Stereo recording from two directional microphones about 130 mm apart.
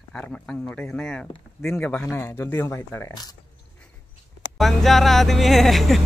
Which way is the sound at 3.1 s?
30° left (ahead or behind).